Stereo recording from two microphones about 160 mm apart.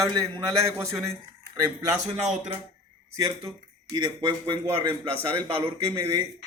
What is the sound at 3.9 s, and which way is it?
Speech, 25° right (ahead or behind).